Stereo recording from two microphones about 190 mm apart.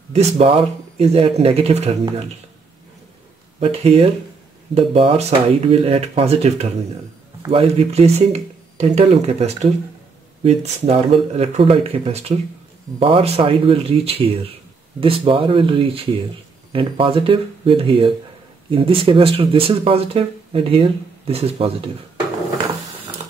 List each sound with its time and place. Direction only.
0.1 s speech: 30° right (ahead or behind)
3.5 s speech: 30° right (ahead or behind)